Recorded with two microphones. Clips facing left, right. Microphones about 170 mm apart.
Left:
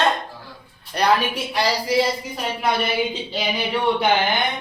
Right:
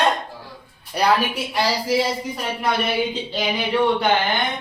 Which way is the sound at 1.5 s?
5° right (ahead or behind).